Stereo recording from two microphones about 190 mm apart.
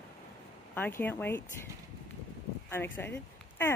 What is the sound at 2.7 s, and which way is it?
Speech, 10° left (ahead or behind).